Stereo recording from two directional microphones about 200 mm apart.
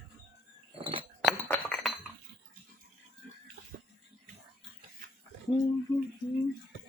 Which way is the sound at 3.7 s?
40° right (ahead or behind).